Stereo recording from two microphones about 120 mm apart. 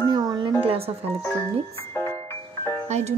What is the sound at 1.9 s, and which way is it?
Music, 20° left (ahead or behind).